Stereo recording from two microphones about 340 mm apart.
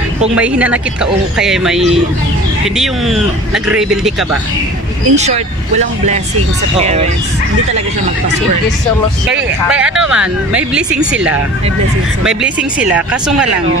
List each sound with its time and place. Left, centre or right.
0.4 s speech: centre
5.1 s speech: centre
9.3 s speech: centre
12.2 s speech: centre